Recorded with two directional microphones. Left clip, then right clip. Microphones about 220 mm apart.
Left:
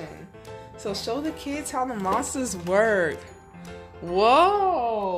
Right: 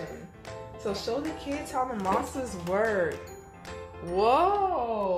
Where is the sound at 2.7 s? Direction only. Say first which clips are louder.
Left 6 dB; 45° left (ahead or behind).